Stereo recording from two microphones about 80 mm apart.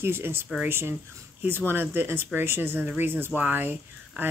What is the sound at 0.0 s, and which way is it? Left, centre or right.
Speech, right.